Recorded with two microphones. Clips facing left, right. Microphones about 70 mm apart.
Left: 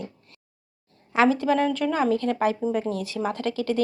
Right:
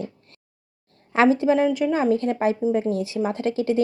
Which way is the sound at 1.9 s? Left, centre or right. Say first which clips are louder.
Right 2 dB; right.